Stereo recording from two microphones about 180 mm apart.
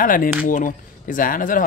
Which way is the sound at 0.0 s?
50° left (ahead or behind).